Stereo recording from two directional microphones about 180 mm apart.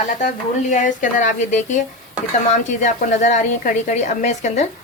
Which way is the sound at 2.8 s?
45° left (ahead or behind).